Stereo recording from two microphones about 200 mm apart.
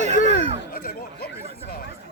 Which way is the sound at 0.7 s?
50° left (ahead or behind).